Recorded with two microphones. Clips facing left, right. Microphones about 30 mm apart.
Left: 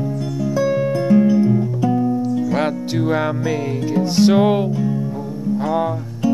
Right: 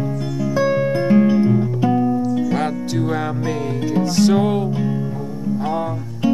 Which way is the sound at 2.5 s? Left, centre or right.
Centre.